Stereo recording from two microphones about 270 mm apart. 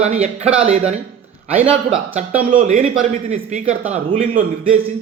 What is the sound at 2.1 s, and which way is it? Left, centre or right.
Speech, right.